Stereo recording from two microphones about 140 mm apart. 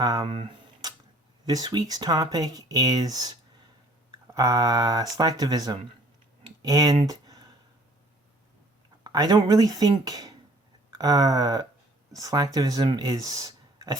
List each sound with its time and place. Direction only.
0.0 s speech: 30° right (ahead or behind)
0.3 s a sound: 40° right (ahead or behind)
1.5 s speech: 30° right (ahead or behind)
9.0 s speech: 25° right (ahead or behind)